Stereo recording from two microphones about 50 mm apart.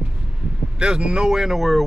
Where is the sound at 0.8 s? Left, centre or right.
Centre.